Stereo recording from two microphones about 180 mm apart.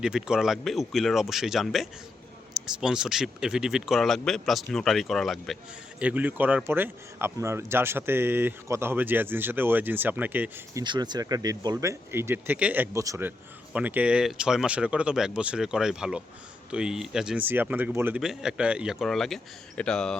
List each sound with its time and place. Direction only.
0.0 s speech: 5° right (ahead or behind)
10.8 s speech: 25° right (ahead or behind); by 20.1 s 5° left (ahead or behind)